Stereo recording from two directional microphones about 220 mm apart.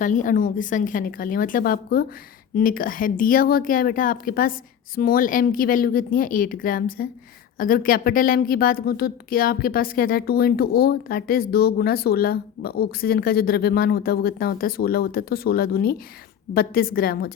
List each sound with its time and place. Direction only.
0.0 s a woman's voice: 35° left (ahead or behind)